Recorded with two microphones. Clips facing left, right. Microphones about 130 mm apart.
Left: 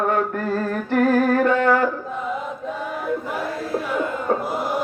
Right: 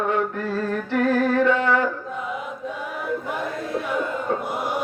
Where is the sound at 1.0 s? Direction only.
45° left (ahead or behind).